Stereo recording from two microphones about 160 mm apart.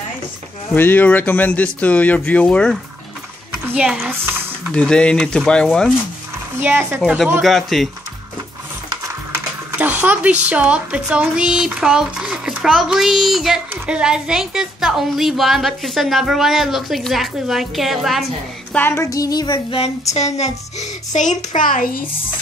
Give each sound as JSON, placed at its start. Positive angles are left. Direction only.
{"t": 0.7, "sound": "speech", "side_deg": 10}
{"t": 3.6, "sound": "a woman's voice", "side_deg": -5}
{"t": 4.7, "sound": "speech", "side_deg": 5}
{"t": 6.6, "sound": "speech", "side_deg": -15}
{"t": 7.4, "sound": "speech", "side_deg": 0}
{"t": 9.3, "sound": "speech", "side_deg": -10}
{"t": 18.7, "sound": "a sound", "side_deg": 15}
{"t": 20.3, "sound": "a child's voice", "side_deg": 45}